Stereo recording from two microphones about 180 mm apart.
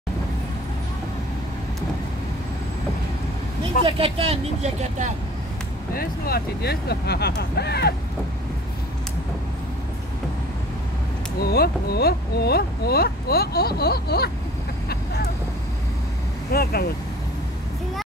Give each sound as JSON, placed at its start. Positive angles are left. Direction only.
{"t": 3.8, "sound": "speech", "side_deg": -30}
{"t": 5.9, "sound": "speech", "side_deg": 60}
{"t": 11.4, "sound": "speech", "side_deg": 60}
{"t": 16.5, "sound": "speech", "side_deg": 55}